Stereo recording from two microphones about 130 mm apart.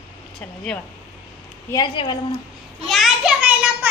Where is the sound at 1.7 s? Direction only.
35° left (ahead or behind).